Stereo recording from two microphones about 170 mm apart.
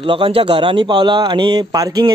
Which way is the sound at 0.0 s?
30° right (ahead or behind).